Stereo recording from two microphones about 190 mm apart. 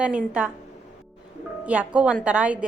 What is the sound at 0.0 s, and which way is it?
Speech, 5° right (ahead or behind).